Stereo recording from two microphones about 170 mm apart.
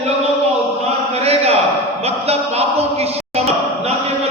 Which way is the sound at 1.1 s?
35° right (ahead or behind).